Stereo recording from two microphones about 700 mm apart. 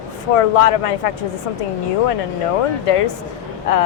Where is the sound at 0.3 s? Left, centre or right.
Left.